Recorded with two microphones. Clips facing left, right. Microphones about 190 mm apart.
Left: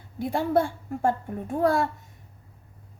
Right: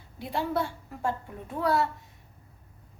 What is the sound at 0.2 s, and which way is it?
A woman's voice, 50° left (ahead or behind).